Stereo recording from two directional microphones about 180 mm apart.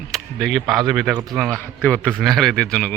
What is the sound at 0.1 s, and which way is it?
A man's voice, centre (ahead or behind).